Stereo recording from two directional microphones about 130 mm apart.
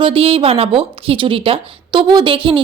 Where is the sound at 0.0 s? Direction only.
45° right (ahead or behind).